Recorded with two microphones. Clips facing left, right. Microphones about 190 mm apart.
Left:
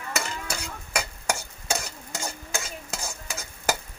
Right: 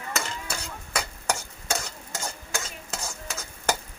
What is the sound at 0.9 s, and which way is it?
Stir, 15° left (ahead or behind).